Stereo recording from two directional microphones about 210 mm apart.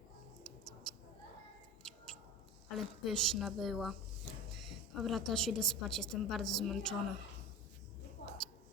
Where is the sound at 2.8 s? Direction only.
Centre (ahead or behind).